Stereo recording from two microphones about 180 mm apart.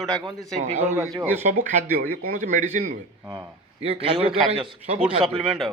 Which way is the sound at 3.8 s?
30° right (ahead or behind).